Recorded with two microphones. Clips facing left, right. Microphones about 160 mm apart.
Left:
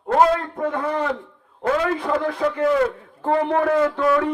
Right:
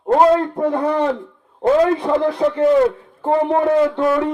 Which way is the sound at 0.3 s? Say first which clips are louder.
Right 6 dB; 30° right (ahead or behind).